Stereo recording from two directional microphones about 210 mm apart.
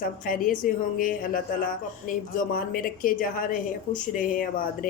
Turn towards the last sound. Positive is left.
turn(degrees=40)  # may be behind; listen again after turning